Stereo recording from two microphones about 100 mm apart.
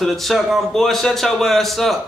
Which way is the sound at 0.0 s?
Centre (ahead or behind).